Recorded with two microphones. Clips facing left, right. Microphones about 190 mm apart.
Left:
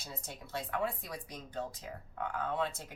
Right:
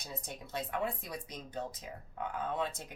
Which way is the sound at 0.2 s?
20° right (ahead or behind).